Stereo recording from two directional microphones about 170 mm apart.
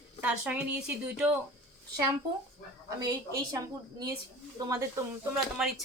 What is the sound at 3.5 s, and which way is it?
Speech, 20° right (ahead or behind).